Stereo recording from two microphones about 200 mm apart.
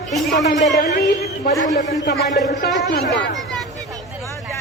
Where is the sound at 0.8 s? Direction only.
55° left (ahead or behind).